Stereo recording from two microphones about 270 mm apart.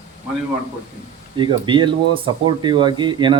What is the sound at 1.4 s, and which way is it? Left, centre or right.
Speech, centre.